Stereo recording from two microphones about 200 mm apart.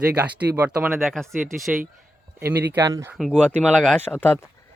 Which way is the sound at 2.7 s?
15° right (ahead or behind).